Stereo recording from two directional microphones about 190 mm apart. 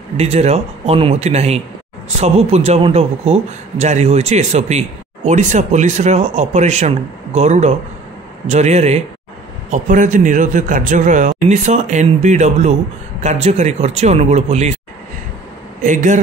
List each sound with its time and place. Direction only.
0.2 s a man's voice: 35° right (ahead or behind)
15.8 s a man's voice: 40° right (ahead or behind)